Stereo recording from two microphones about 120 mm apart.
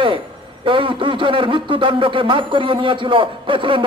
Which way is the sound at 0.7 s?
45° right (ahead or behind).